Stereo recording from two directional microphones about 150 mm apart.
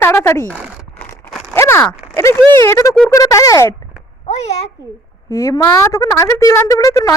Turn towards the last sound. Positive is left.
turn(degrees=25)  # may be behind; listen again after turning